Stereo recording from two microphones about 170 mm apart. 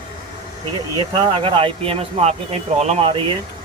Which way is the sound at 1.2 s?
30° right (ahead or behind).